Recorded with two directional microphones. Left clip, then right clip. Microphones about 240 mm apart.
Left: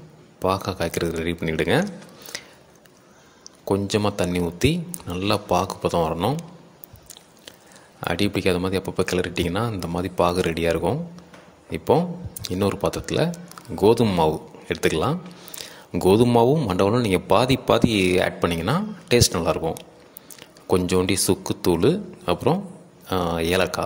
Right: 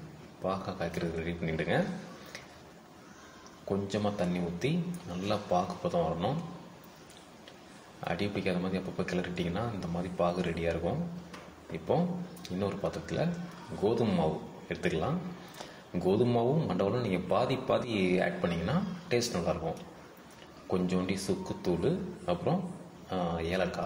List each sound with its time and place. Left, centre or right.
0.4 s speech: left
2.3 s a sound: left
3.6 s speech: left
8.0 s speech: left